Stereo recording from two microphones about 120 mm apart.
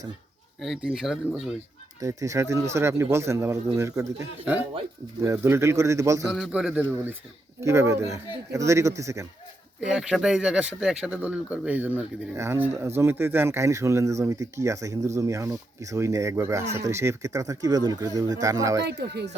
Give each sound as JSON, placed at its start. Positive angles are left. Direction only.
{"t": 0.6, "sound": "speech", "side_deg": -5}
{"t": 2.0, "sound": "speech", "side_deg": -25}
{"t": 6.2, "sound": "speech", "side_deg": 0}
{"t": 9.9, "sound": "speech", "side_deg": -5}